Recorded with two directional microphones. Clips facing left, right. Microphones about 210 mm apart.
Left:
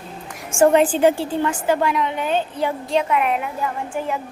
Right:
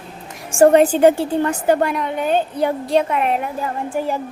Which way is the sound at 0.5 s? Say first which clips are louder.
Right 3 dB; 40° right (ahead or behind).